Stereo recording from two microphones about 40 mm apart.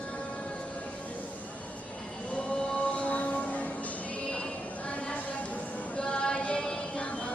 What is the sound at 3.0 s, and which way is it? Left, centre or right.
Music, left.